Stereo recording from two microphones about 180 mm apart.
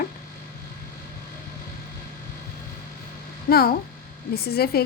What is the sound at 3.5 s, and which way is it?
Speech, 60° left (ahead or behind).